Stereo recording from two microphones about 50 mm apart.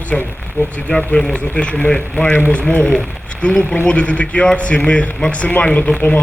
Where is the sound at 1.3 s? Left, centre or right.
Left.